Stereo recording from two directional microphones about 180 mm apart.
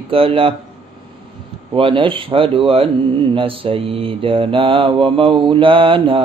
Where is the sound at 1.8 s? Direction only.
30° right (ahead or behind).